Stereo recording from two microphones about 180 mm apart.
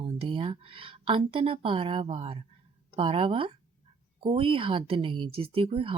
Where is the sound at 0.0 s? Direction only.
30° right (ahead or behind).